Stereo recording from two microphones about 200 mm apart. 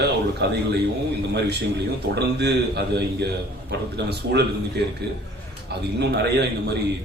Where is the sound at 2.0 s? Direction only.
55° right (ahead or behind).